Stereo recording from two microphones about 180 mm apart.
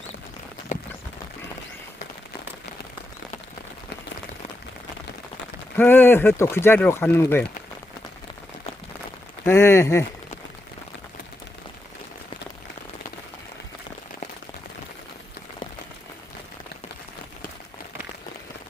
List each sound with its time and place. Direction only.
0.7 s a sound: 45° left (ahead or behind)
5.7 s speech: 10° left (ahead or behind)
9.5 s speech: 15° left (ahead or behind)